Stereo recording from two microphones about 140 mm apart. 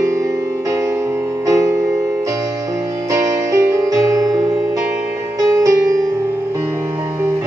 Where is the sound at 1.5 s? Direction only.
20° right (ahead or behind).